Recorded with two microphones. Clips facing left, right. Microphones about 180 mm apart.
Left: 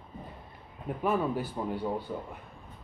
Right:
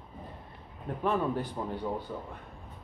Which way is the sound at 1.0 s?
5° left (ahead or behind).